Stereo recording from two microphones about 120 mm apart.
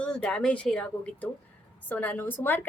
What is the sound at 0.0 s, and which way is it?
A woman's voice, 10° left (ahead or behind).